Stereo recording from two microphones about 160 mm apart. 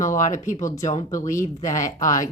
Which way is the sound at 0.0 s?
55° left (ahead or behind).